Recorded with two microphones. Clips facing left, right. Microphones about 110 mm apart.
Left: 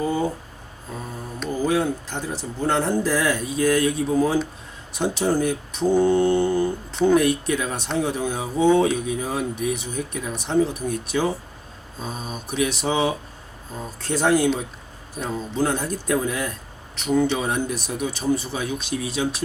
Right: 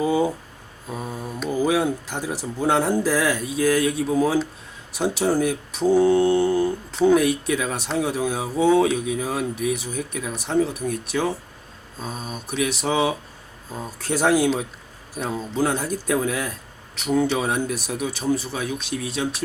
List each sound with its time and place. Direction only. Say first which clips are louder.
0.0 s speech: right 3 dB; 10° right (ahead or behind)